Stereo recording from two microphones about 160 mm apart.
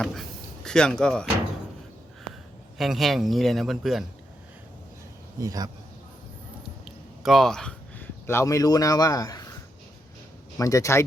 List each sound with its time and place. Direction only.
0.0 s speech: centre (ahead or behind)
2.7 s a man's voice: centre (ahead or behind)
5.4 s speech: 20° right (ahead or behind)
7.2 s speech: centre (ahead or behind); by 9.5 s 20° left (ahead or behind)
10.6 s speech: 20° left (ahead or behind)